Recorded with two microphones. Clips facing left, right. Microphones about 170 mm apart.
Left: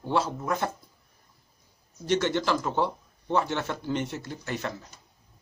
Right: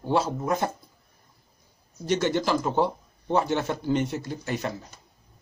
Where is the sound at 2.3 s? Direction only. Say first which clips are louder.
Right 2 dB; 10° right (ahead or behind).